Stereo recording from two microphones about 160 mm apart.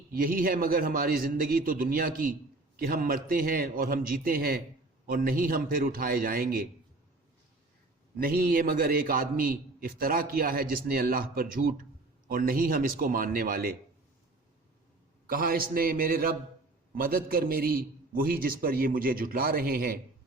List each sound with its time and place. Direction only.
0.1 s a man's voice: 60° right (ahead or behind)
8.2 s a man's voice: 70° right (ahead or behind)
15.3 s a man's voice: 65° right (ahead or behind)